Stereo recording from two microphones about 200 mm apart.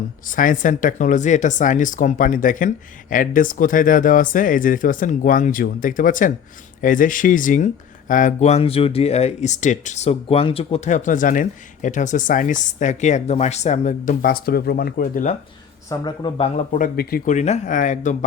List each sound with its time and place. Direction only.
0.3 s speech: 40° left (ahead or behind)
15.9 s speech: 20° left (ahead or behind)
16.6 s speech: 40° left (ahead or behind)